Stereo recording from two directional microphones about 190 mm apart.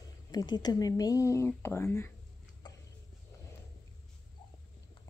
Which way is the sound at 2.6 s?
20° left (ahead or behind).